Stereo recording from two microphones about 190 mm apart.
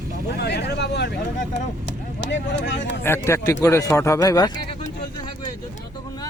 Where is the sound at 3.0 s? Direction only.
15° left (ahead or behind).